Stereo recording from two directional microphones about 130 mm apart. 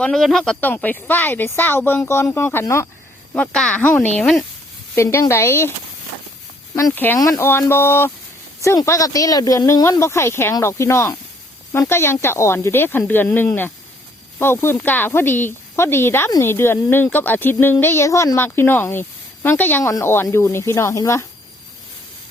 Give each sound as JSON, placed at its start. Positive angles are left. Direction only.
{"t": 0.0, "sound": "speech", "side_deg": 5}
{"t": 0.6, "sound": "speech", "side_deg": 15}
{"t": 3.3, "sound": "speech", "side_deg": 10}
{"t": 4.9, "sound": "speech", "side_deg": 20}
{"t": 6.9, "sound": "speech", "side_deg": 15}